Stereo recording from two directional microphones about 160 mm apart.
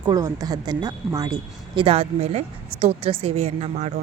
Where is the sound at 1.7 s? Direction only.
35° right (ahead or behind).